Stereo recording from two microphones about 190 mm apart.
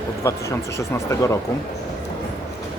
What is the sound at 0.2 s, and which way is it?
Speech, 15° left (ahead or behind).